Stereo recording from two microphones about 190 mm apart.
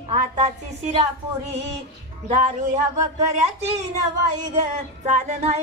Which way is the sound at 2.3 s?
40° right (ahead or behind).